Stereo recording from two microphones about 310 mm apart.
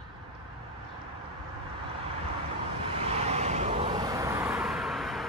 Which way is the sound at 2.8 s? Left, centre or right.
Centre.